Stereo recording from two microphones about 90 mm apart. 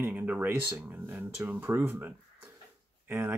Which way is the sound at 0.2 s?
20° right (ahead or behind).